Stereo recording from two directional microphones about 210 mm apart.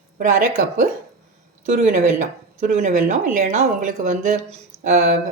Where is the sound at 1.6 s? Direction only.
35° right (ahead or behind).